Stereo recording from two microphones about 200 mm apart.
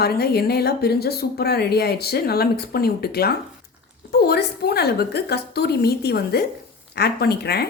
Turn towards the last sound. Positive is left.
turn(degrees=55)  # may be behind; listen again after turning